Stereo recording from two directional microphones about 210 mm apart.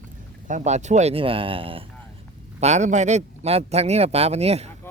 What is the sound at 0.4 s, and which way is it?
A man's voice, 35° right (ahead or behind).